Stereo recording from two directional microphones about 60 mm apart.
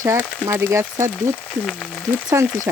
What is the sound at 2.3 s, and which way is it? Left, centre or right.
Speech, right.